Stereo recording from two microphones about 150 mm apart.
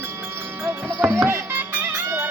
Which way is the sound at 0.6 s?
15° right (ahead or behind).